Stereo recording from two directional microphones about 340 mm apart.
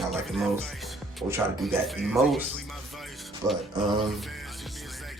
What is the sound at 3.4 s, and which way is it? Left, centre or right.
Speech, centre.